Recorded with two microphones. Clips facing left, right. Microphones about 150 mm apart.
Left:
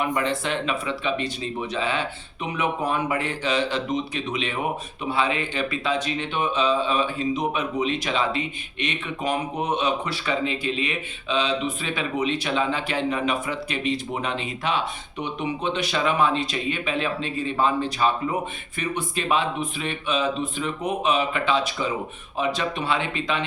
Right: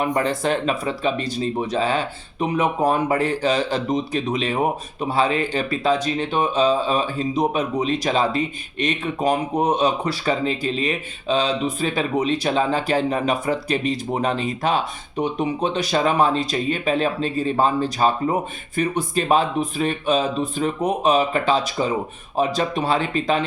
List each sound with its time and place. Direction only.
0.0 s speech: 40° right (ahead or behind)